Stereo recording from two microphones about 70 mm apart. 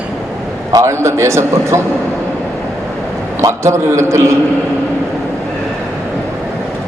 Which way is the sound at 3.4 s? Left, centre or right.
Right.